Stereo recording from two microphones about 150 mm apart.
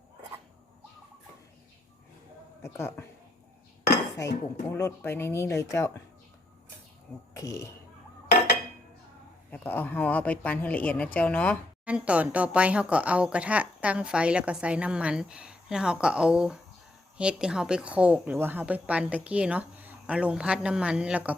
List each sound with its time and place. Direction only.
2.6 s speech: 15° left (ahead or behind)
4.2 s speech: 20° left (ahead or behind)
7.3 s speech: 20° left (ahead or behind)
9.5 s speech: 10° left (ahead or behind)
11.9 s speech: 10° right (ahead or behind)